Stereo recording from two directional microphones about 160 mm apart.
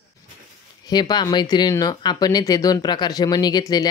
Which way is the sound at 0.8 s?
25° left (ahead or behind).